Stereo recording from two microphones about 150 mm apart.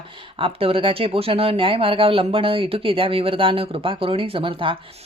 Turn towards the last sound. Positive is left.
turn(degrees=-35)  # may be behind; listen again after turning